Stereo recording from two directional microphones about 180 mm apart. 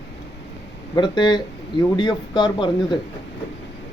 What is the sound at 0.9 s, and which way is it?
Speech, 25° left (ahead or behind).